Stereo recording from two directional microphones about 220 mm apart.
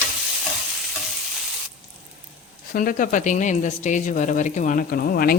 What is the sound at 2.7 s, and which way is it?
Speech, 40° left (ahead or behind).